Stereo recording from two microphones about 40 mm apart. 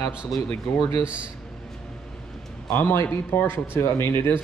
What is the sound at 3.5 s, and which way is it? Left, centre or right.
Speech, left.